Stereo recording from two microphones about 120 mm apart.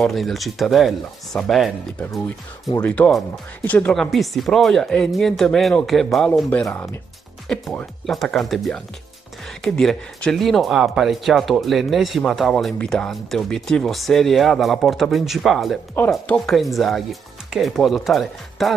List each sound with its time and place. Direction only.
0.0 s speech: centre (ahead or behind)
2.8 s speech: 10° left (ahead or behind)
6.7 s speech: 20° left (ahead or behind); by 18.8 s centre (ahead or behind)